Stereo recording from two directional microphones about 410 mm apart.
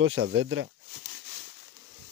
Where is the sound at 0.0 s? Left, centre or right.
Right.